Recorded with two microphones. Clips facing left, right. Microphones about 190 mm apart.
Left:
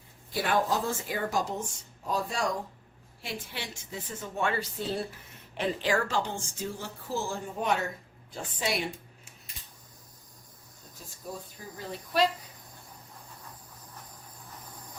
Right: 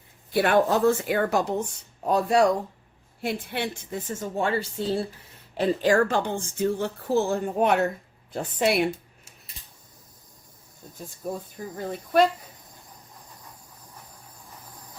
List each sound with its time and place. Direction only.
0.3 s a woman's voice: 60° right (ahead or behind); by 4.3 s 45° right (ahead or behind)
4.4 s speech: 30° right (ahead or behind)
5.5 s a woman's voice: 40° right (ahead or behind); by 8.9 s 60° right (ahead or behind)
11.2 s a woman's voice: 50° right (ahead or behind)